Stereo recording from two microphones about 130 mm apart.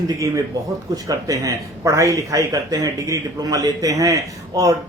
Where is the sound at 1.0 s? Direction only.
25° right (ahead or behind).